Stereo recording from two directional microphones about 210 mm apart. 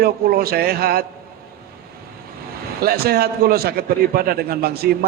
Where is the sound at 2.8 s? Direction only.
45° right (ahead or behind).